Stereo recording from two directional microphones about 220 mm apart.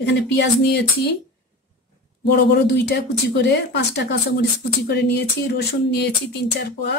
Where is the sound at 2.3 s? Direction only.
50° left (ahead or behind).